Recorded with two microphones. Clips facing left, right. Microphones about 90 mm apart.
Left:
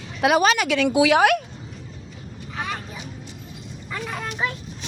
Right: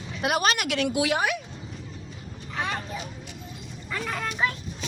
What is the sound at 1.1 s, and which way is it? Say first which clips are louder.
Speech: left 9 dB; 75° left (ahead or behind).